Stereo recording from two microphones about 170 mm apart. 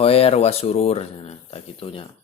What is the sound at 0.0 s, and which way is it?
Speech, 35° left (ahead or behind).